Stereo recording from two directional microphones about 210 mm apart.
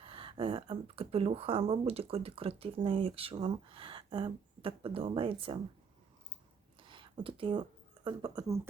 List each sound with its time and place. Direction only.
0.0 s speech: 25° right (ahead or behind)
6.7 s a sound: 25° right (ahead or behind)
8.0 s speech: 20° right (ahead or behind)